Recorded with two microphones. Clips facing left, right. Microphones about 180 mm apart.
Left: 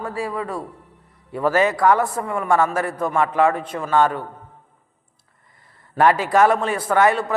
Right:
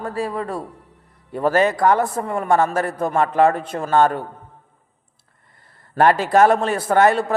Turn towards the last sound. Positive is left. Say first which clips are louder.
# right 2 dB
turn(degrees=-40)  # may be behind; listen again after turning